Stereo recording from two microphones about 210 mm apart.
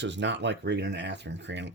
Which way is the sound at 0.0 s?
60° right (ahead or behind).